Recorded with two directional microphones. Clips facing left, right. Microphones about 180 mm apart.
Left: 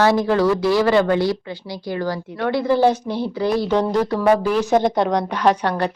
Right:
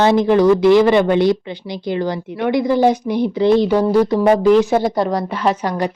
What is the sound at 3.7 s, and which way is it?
A woman's voice, 10° right (ahead or behind).